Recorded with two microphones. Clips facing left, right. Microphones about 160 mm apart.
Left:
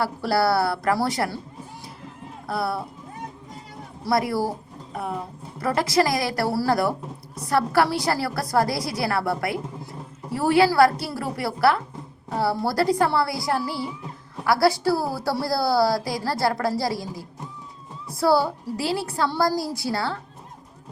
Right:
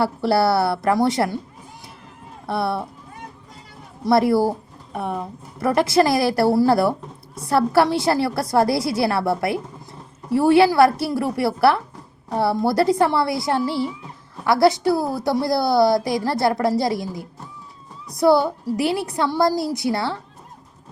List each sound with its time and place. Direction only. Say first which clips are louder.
0.0 s a woman's voice: right 4 dB; 25° right (ahead or behind)
2.5 s a woman's voice: right 3 dB; 25° right (ahead or behind)
4.0 s a woman's voice: right 6 dB; 25° right (ahead or behind)
5.5 s a woman's voice: right 4 dB; 25° right (ahead or behind)